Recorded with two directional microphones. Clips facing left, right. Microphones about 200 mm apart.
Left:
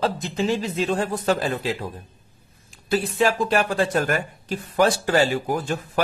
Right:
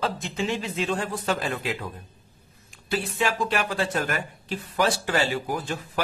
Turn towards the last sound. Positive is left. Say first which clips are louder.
# left 5 dB
turn(degrees=45)  # may be behind; listen again after turning